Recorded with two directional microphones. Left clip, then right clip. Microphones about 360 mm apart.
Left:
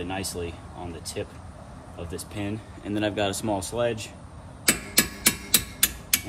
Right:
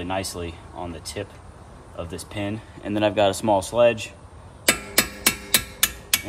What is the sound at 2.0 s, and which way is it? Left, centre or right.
Speech, centre.